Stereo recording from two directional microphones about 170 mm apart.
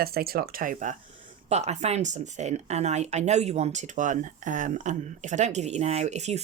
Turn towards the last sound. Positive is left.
turn(degrees=-40)  # may be behind; listen again after turning